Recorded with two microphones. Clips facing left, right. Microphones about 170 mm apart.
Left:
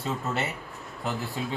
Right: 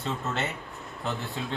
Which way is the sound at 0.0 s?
Centre (ahead or behind).